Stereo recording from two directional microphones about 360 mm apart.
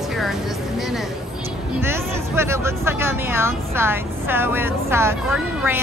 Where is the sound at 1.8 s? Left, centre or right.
Centre.